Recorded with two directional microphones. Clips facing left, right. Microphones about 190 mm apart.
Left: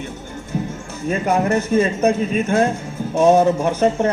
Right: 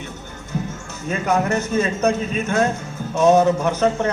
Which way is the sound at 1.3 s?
30° left (ahead or behind).